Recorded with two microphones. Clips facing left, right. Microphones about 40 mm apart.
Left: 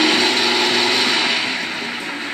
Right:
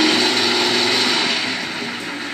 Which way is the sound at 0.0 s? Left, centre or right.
Centre.